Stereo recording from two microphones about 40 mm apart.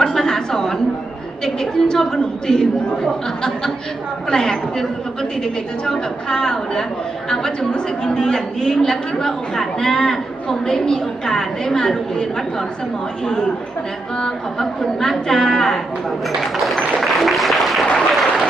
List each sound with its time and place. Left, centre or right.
0.0 s a sound: centre
1.5 s a woman's voice: centre
14.6 s a woman's voice: centre
16.6 s applause: centre